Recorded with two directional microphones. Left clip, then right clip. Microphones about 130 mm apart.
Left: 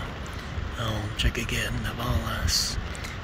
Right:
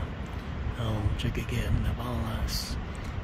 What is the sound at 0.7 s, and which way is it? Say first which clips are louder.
Speech: left 6 dB; 20° right (ahead or behind).